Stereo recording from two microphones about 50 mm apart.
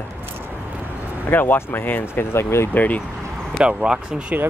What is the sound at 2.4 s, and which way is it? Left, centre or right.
Speech, left.